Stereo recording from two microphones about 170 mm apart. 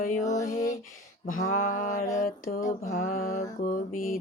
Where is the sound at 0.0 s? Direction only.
50° left (ahead or behind).